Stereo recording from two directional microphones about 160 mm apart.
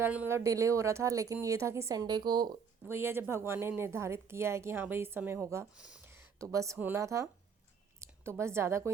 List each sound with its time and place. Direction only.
0.0 s speech: 10° right (ahead or behind)
2.8 s a woman's voice: 15° right (ahead or behind)